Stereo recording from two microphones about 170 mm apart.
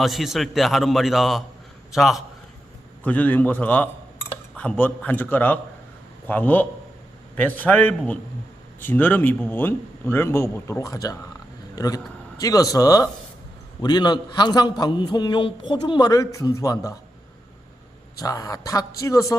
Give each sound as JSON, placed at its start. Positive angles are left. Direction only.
{"t": 0.0, "sound": "a man's voice", "side_deg": 0}
{"t": 3.0, "sound": "a man's voice", "side_deg": 10}
{"t": 18.2, "sound": "a man's voice", "side_deg": 20}